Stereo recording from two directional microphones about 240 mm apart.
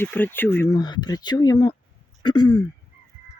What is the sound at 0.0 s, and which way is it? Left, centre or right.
Speech, centre.